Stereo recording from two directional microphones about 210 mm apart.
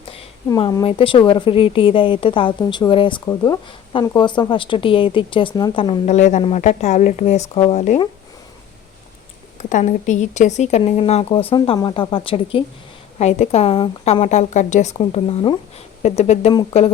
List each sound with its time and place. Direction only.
0.4 s a woman's voice: 20° left (ahead or behind)
9.6 s a woman's voice: 35° left (ahead or behind)